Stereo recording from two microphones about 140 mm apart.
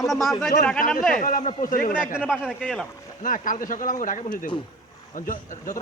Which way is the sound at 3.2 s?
65° left (ahead or behind).